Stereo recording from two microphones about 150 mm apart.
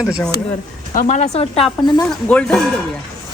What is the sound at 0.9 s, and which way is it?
Speech, 50° left (ahead or behind).